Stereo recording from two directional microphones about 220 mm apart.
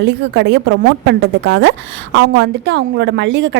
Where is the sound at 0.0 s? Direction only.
50° right (ahead or behind).